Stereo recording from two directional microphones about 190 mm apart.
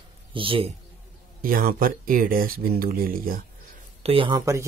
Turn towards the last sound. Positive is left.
turn(degrees=-30)  # may be behind; listen again after turning